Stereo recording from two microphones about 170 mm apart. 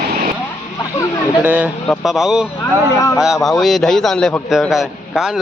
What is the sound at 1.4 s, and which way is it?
Speech, 10° right (ahead or behind).